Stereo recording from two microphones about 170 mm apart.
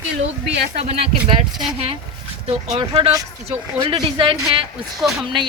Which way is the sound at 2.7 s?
30° right (ahead or behind).